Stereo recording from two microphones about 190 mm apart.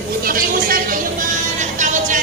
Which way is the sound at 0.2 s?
50° right (ahead or behind).